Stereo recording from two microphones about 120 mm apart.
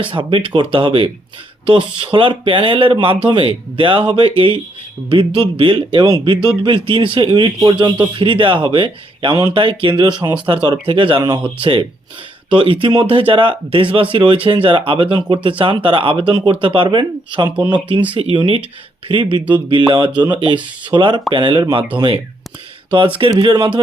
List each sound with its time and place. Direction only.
0.1 s speech: 45° right (ahead or behind)